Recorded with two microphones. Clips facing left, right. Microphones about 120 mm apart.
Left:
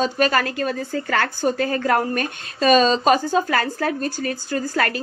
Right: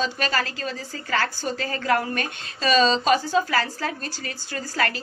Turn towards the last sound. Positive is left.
turn(degrees=50)  # may be behind; listen again after turning